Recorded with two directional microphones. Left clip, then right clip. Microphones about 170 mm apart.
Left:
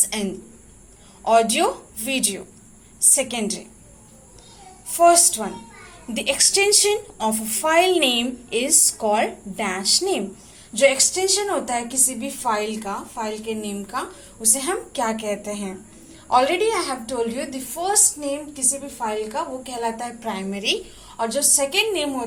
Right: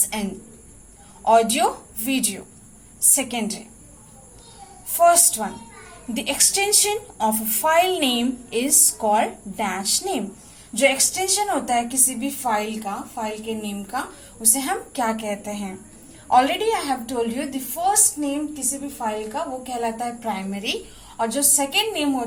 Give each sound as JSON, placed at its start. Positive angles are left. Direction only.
{"t": 1.2, "sound": "a woman's voice", "side_deg": 20}
{"t": 4.9, "sound": "a woman's voice", "side_deg": 20}
{"t": 14.4, "sound": "a woman's voice", "side_deg": 20}